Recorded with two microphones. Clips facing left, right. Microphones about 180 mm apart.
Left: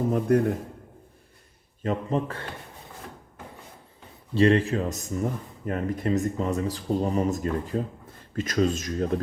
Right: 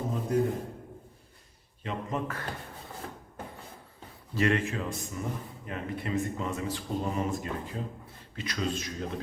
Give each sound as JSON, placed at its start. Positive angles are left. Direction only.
{"t": 0.1, "sound": "a man's voice", "side_deg": 65}
{"t": 1.8, "sound": "speech", "side_deg": 40}
{"t": 4.4, "sound": "speech", "side_deg": 35}